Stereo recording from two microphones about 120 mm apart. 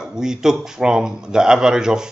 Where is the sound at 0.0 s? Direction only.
5° right (ahead or behind).